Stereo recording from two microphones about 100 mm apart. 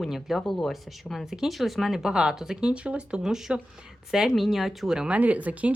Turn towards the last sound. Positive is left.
turn(degrees=-15)  # may be behind; listen again after turning